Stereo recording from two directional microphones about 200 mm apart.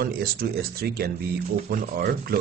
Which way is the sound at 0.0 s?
50° right (ahead or behind).